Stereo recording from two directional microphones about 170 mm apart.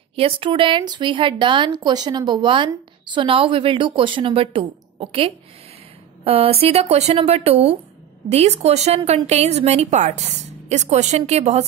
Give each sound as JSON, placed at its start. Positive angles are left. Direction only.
{"t": 0.1, "sound": "a woman's voice", "side_deg": -30}